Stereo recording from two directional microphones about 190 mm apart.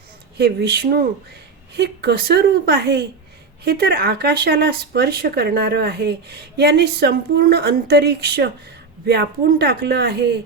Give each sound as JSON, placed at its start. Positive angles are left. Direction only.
{"t": 0.3, "sound": "speech", "side_deg": -55}